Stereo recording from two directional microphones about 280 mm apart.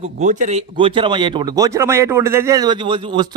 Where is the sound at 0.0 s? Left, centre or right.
Right.